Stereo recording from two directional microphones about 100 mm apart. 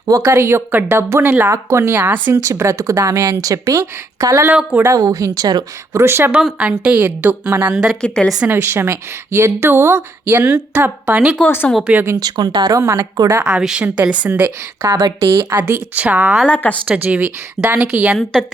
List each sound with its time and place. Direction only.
0.0 s speech: 30° right (ahead or behind)
2.4 s speech: 30° right (ahead or behind)
6.0 s speech: 25° right (ahead or behind)
6.4 s a woman's voice: 10° right (ahead or behind)
8.0 s speech: 10° left (ahead or behind)
8.4 s speech: 20° right (ahead or behind)
11.4 s speech: 20° left (ahead or behind)
11.9 s speech: 20° right (ahead or behind)
12.1 s speech: 45° right (ahead or behind)
12.8 s speech: 30° right (ahead or behind)
13.4 s a woman's voice: 5° right (ahead or behind)
16.5 s speech: 15° left (ahead or behind)
16.8 s a woman's voice: 15° right (ahead or behind)